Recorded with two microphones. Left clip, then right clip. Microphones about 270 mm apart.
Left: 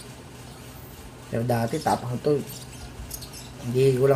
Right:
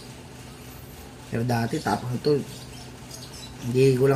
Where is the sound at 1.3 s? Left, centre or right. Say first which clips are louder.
Left 1 dB; centre.